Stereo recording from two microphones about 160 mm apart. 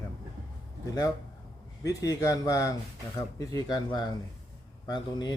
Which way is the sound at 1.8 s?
20° left (ahead or behind).